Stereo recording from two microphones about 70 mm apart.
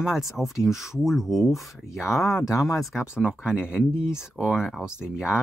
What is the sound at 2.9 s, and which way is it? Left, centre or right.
Speech, centre.